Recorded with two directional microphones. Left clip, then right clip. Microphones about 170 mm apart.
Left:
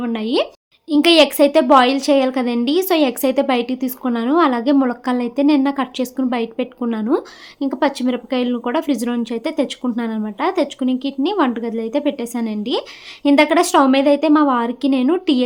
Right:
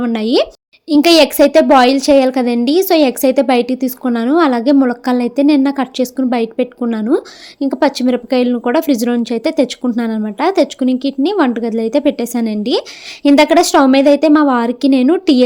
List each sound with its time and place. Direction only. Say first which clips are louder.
0.0 s a woman's voice: right 5 dB; 35° right (ahead or behind)